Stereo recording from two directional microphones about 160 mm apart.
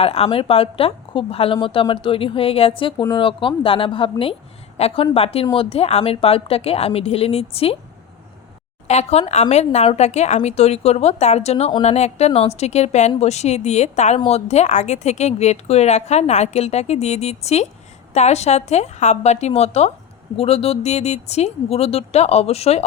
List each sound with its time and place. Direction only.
0.0 s speech: 40° left (ahead or behind)
8.9 s speech: 45° left (ahead or behind)